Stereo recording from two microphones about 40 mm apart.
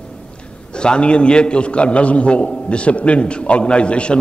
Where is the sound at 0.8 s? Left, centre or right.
Left.